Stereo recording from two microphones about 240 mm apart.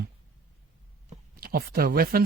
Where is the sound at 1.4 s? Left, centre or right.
Right.